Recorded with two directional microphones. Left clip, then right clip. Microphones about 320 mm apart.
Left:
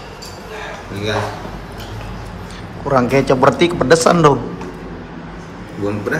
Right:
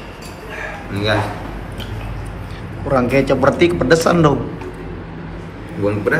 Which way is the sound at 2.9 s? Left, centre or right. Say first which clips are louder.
Left 1 dB; centre.